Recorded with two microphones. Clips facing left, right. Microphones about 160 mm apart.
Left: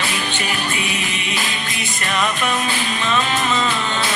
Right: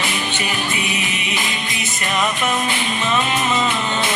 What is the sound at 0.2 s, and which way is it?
Music, 15° right (ahead or behind).